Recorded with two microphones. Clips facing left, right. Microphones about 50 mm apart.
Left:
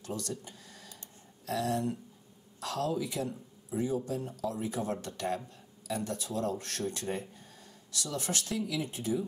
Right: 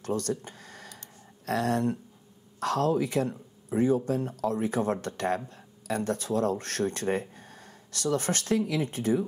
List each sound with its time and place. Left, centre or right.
0.0 s speech: right